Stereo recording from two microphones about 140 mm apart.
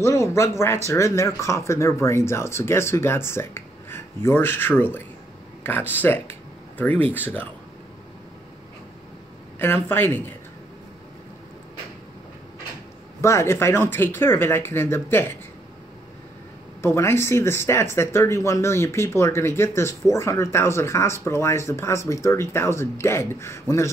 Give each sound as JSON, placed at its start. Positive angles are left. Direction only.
{"t": 0.0, "sound": "speech", "side_deg": 20}
{"t": 9.6, "sound": "speech", "side_deg": 15}
{"t": 13.2, "sound": "speech", "side_deg": 20}
{"t": 16.8, "sound": "speech", "side_deg": 20}